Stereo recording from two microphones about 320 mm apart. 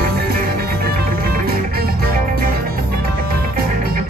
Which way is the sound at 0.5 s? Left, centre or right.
Right.